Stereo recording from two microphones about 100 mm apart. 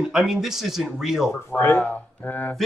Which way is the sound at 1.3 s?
25° left (ahead or behind).